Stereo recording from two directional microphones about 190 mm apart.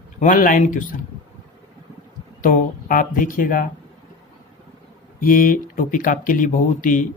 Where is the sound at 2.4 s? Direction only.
45° left (ahead or behind).